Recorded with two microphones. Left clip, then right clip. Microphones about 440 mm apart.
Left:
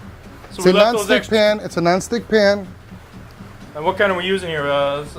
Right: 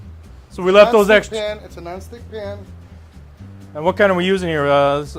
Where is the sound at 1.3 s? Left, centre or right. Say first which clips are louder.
Left 9 dB; left.